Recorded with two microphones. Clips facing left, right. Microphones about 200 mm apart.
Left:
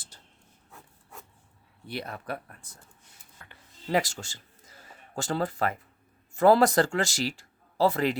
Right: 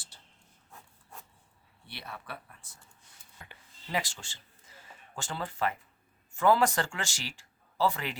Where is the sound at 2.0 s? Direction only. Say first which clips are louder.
Left 7 dB; 45° left (ahead or behind).